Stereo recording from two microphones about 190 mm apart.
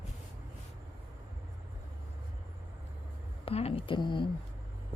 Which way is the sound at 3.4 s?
30° left (ahead or behind).